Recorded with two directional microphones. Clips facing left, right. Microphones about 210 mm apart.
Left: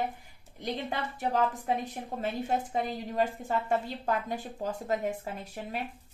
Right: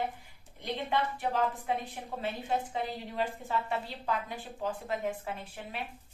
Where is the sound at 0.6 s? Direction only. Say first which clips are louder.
Right 1 dB; 40° left (ahead or behind).